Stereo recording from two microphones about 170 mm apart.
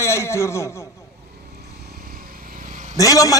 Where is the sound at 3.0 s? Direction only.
20° left (ahead or behind).